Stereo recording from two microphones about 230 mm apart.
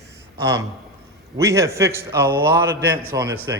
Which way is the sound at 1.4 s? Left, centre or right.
Centre.